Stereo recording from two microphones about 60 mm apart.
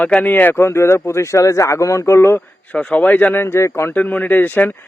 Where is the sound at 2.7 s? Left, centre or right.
Left.